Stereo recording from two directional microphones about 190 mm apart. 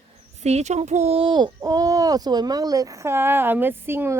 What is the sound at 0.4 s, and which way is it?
Speech, 35° right (ahead or behind).